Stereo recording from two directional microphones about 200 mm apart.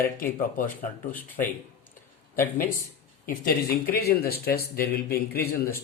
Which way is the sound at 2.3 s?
45° left (ahead or behind).